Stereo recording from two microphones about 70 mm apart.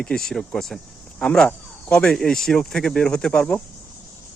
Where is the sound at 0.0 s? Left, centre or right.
Centre.